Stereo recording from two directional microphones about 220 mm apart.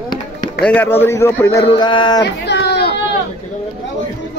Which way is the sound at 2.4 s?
50° left (ahead or behind).